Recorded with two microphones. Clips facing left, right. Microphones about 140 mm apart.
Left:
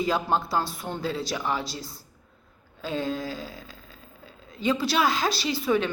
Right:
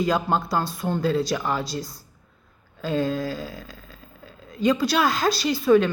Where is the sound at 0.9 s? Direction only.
50° right (ahead or behind).